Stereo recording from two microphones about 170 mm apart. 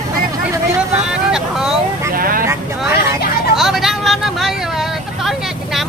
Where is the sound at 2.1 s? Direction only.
55° right (ahead or behind).